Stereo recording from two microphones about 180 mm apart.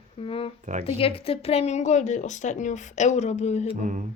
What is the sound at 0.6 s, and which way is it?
Speech, 40° right (ahead or behind).